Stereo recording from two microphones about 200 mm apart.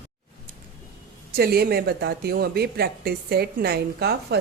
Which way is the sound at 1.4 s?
50° right (ahead or behind).